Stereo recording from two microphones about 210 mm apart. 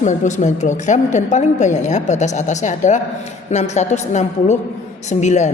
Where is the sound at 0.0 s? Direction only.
35° left (ahead or behind).